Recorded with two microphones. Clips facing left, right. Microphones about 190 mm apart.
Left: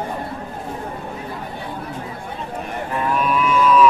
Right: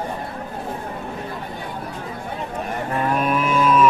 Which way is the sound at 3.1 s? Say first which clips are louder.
Left 2 dB; 45° right (ahead or behind).